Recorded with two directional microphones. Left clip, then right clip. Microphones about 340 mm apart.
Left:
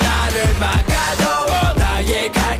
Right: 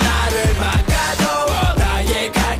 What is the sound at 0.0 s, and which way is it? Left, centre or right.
Music, centre.